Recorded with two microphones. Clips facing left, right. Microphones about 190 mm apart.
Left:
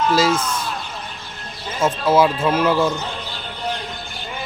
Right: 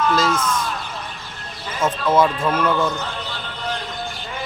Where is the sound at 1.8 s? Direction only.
5° left (ahead or behind).